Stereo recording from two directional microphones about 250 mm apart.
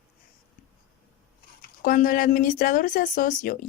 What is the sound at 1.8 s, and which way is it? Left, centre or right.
A woman's voice, left.